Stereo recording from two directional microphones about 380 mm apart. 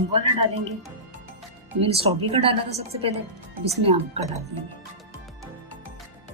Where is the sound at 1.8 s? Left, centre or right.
Centre.